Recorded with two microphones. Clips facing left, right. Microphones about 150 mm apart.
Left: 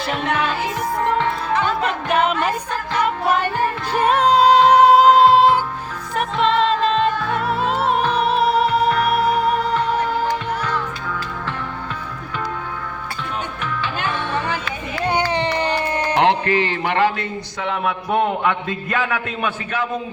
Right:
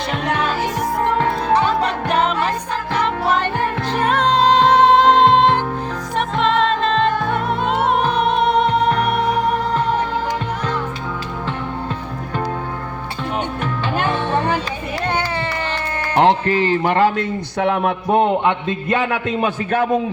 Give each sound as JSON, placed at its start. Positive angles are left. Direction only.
{"t": 1.5, "sound": "music", "side_deg": -35}
{"t": 4.0, "sound": "music", "side_deg": 10}
{"t": 8.9, "sound": "music", "side_deg": -35}
{"t": 13.6, "sound": "music", "side_deg": -50}
{"t": 15.0, "sound": "a sound", "side_deg": 15}
{"t": 16.1, "sound": "a man's voice", "side_deg": -40}
{"t": 18.1, "sound": "a man's voice", "side_deg": -25}